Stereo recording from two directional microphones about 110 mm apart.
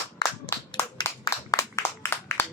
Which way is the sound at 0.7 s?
45° left (ahead or behind).